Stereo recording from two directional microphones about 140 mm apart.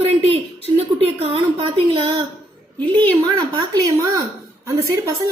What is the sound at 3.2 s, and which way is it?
A woman's voice, 30° right (ahead or behind).